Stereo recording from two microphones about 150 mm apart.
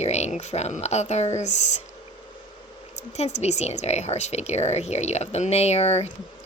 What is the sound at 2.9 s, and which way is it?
Speech, 50° left (ahead or behind).